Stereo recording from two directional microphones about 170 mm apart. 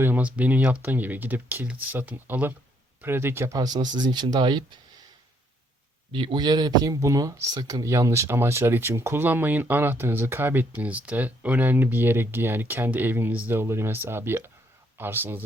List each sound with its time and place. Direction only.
0.0 s speech: 10° right (ahead or behind); by 4.8 s 25° right (ahead or behind)
6.1 s speech: 30° right (ahead or behind); by 15.4 s 10° right (ahead or behind)